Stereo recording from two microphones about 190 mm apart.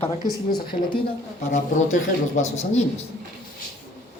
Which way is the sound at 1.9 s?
40° left (ahead or behind).